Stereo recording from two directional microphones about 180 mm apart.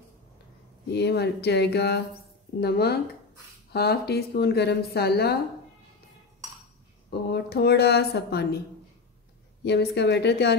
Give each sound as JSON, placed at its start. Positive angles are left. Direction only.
{"t": 0.9, "sound": "a woman's voice", "side_deg": 65}
{"t": 7.1, "sound": "a woman's voice", "side_deg": 65}
{"t": 9.7, "sound": "a woman's voice", "side_deg": 65}